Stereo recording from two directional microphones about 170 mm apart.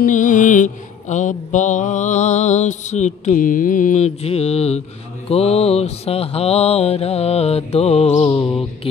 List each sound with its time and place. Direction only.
0.0 s mantra: 50° left (ahead or behind)